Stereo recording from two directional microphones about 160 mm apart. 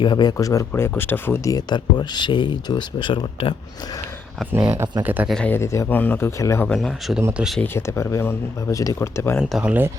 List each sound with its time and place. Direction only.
0.0 s speech: 25° left (ahead or behind)
1.5 s speech: 25° left (ahead or behind)
4.5 s speech: 15° right (ahead or behind)
5.3 s speech: 10° left (ahead or behind)
6.7 s speech: centre (ahead or behind)
7.2 s speech: 15° right (ahead or behind)
7.6 s speech: 15° left (ahead or behind)
9.4 s speech: 5° right (ahead or behind)